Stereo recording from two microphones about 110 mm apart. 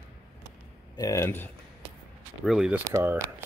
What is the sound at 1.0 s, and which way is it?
Speech, 30° left (ahead or behind).